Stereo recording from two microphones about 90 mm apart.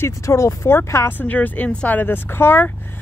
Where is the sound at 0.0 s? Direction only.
30° left (ahead or behind).